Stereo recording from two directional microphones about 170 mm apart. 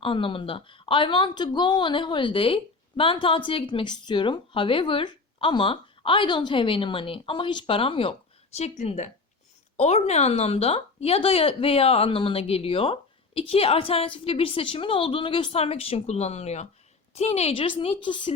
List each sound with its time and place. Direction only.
0.0 s a woman's voice: 30° left (ahead or behind)
8.5 s a woman's voice: 40° left (ahead or behind)